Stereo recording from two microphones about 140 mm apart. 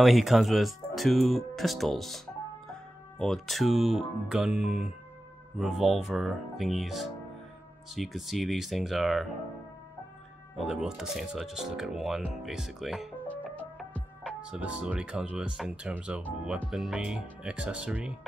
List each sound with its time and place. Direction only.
0.0 s speech: centre (ahead or behind)
10.6 s speech: 5° right (ahead or behind)
13.3 s music: 10° left (ahead or behind)
14.4 s speech: 10° right (ahead or behind)